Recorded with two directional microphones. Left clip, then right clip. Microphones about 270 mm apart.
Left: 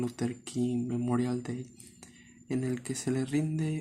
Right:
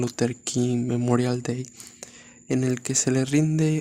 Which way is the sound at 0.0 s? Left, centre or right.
Right.